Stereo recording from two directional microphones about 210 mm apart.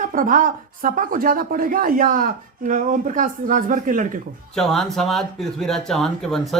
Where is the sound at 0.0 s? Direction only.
40° right (ahead or behind).